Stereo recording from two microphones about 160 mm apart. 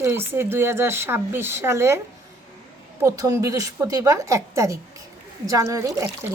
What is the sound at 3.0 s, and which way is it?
A woman's voice, 20° right (ahead or behind).